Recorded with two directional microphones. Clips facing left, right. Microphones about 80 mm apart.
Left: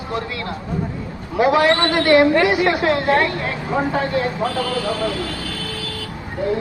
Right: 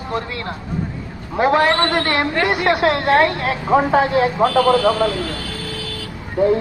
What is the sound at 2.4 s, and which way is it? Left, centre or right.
Speech, centre.